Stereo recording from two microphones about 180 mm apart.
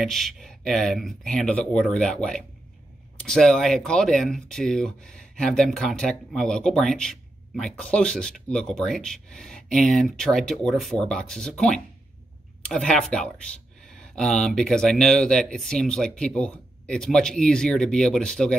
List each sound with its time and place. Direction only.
0.0 s speech: centre (ahead or behind)
3.2 s speech: centre (ahead or behind)